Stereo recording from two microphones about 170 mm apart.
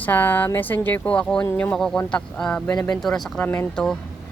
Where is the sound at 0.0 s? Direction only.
10° left (ahead or behind).